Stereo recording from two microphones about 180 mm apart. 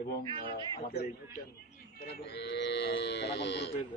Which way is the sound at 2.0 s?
60° left (ahead or behind).